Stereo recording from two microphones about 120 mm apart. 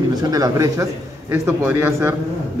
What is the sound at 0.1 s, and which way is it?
Speech, 30° right (ahead or behind).